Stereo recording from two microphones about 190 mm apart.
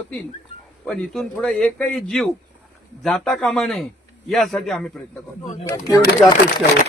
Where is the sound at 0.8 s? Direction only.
Centre (ahead or behind).